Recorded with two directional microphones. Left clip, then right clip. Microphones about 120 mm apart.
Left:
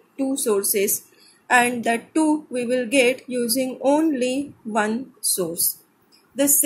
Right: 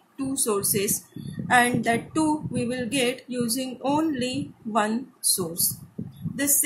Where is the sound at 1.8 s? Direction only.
20° left (ahead or behind).